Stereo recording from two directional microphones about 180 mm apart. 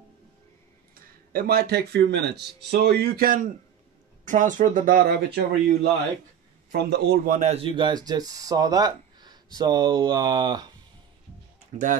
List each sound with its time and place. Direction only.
0.9 s a man's voice: 55° right (ahead or behind)
7.3 s speech: 35° right (ahead or behind)
11.7 s speech: 35° right (ahead or behind)